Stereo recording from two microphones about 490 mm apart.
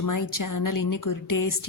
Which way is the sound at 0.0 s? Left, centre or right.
Left.